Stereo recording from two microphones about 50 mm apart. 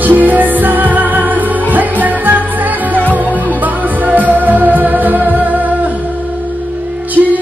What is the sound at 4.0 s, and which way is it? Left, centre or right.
Music, right.